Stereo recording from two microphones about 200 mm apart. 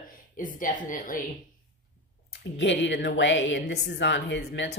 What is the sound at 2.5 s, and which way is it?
Speech, 65° left (ahead or behind).